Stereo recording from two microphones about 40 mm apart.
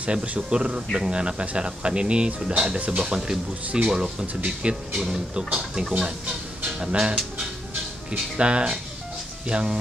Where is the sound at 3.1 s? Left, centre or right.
Centre.